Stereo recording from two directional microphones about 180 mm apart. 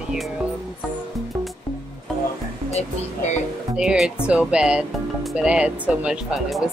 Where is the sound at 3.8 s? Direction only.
Centre (ahead or behind).